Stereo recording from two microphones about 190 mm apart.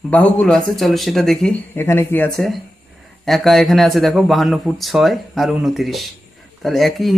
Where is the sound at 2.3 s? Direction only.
Centre (ahead or behind).